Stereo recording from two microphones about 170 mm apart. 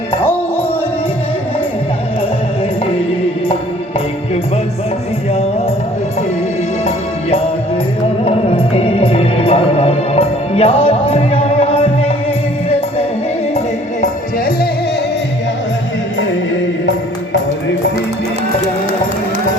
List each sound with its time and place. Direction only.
6.8 s music: 35° left (ahead or behind)
14.0 s music: 60° left (ahead or behind)